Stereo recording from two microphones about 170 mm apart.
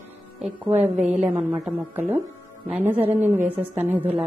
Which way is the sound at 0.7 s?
40° right (ahead or behind).